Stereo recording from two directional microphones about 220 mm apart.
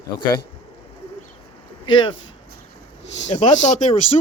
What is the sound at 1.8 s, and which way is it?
Speech, 20° left (ahead or behind).